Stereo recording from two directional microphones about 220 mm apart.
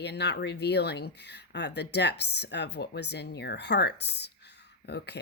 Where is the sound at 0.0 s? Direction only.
50° left (ahead or behind).